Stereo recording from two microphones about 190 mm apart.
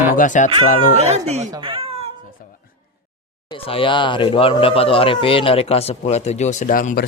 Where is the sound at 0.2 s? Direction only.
40° left (ahead or behind).